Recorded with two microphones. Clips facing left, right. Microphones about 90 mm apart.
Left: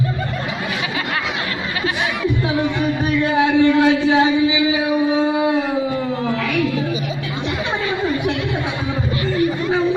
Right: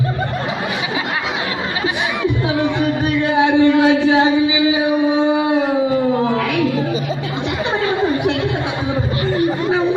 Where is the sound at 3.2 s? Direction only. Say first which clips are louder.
Right 2 dB; 20° right (ahead or behind).